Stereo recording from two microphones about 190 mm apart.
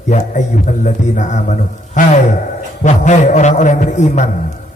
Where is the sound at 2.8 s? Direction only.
40° left (ahead or behind).